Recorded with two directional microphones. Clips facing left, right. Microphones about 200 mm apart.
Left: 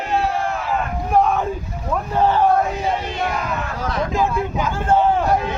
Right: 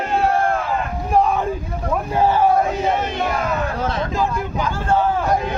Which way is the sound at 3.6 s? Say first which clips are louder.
Right 2 dB; 30° right (ahead or behind).